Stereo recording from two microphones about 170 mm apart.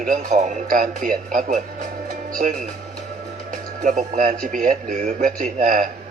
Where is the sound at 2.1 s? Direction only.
55° right (ahead or behind).